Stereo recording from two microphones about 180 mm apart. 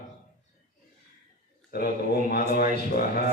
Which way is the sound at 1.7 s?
60° left (ahead or behind).